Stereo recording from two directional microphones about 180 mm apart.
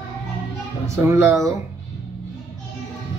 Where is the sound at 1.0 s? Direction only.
15° right (ahead or behind).